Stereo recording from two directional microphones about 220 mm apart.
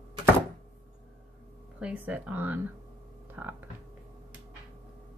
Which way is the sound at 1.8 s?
5° right (ahead or behind).